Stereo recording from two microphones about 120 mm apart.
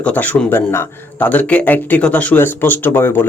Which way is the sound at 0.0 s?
10° left (ahead or behind).